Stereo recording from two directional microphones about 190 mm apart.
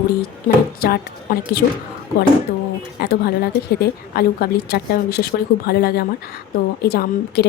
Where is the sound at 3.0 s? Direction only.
60° left (ahead or behind).